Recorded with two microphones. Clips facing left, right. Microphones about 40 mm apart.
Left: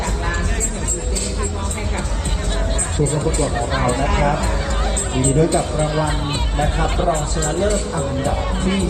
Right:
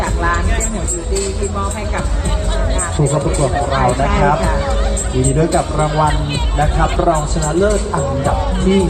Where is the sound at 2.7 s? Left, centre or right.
Right.